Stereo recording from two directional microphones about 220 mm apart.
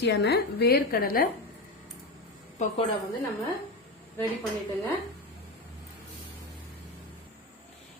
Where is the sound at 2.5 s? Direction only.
35° left (ahead or behind).